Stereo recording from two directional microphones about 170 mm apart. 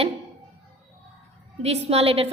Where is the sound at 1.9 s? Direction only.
35° right (ahead or behind).